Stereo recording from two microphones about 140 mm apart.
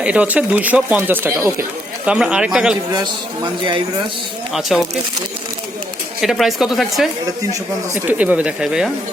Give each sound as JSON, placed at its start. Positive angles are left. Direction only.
{"t": 0.0, "sound": "speech", "side_deg": -10}
{"t": 2.0, "sound": "speech", "side_deg": -5}
{"t": 2.9, "sound": "a man's voice", "side_deg": -35}
{"t": 4.7, "sound": "speech", "side_deg": 0}
{"t": 6.2, "sound": "speech", "side_deg": 0}